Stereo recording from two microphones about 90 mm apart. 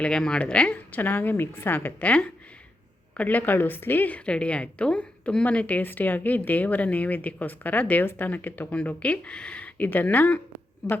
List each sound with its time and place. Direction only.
0.0 s a woman's voice: 10° left (ahead or behind)